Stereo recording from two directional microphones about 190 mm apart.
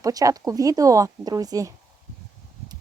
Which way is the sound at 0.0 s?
20° right (ahead or behind).